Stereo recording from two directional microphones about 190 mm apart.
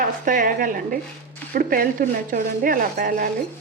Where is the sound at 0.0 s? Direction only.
45° right (ahead or behind).